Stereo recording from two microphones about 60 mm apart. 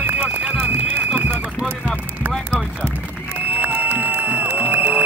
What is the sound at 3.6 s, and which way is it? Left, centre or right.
Music, right.